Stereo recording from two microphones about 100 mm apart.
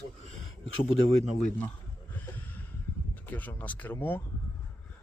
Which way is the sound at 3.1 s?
15° left (ahead or behind).